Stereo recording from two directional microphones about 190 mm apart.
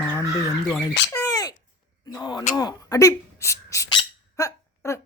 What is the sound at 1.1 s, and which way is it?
Speech, 20° left (ahead or behind).